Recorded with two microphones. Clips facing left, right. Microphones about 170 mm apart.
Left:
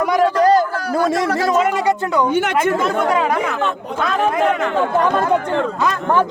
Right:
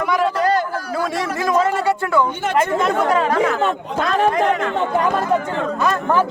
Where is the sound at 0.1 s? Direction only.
40° left (ahead or behind).